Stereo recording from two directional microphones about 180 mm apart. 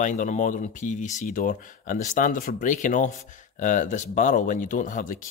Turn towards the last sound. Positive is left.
turn(degrees=45)  # may be behind; listen again after turning